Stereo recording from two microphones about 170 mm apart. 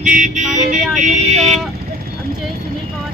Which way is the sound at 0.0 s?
50° right (ahead or behind).